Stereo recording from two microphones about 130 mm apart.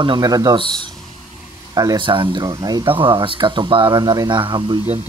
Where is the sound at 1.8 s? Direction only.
35° right (ahead or behind).